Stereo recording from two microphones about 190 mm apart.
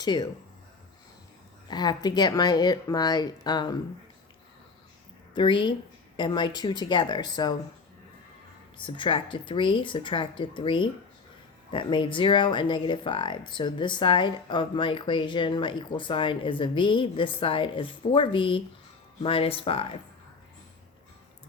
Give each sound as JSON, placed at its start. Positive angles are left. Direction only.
{"t": 0.0, "sound": "speech", "side_deg": 20}
{"t": 1.6, "sound": "speech", "side_deg": 20}
{"t": 5.3, "sound": "a woman's voice", "side_deg": 25}
{"t": 8.8, "sound": "speech", "side_deg": 25}